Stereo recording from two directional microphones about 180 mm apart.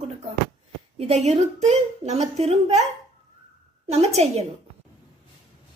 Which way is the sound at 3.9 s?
35° right (ahead or behind).